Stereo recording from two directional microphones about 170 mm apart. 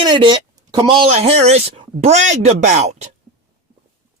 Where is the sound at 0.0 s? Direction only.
25° right (ahead or behind).